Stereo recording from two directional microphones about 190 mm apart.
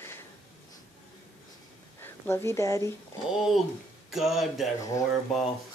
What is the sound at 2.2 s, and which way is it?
Speech, 15° left (ahead or behind).